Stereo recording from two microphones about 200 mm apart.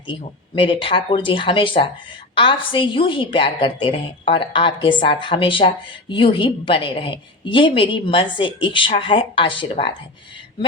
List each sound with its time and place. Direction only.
0.1 s a woman's voice: 25° left (ahead or behind)